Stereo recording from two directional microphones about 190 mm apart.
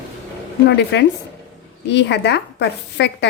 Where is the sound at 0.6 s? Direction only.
65° left (ahead or behind).